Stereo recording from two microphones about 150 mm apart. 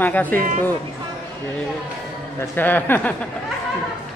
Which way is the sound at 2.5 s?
15° left (ahead or behind).